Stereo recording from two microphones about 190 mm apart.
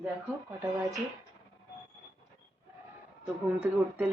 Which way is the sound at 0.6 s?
15° right (ahead or behind).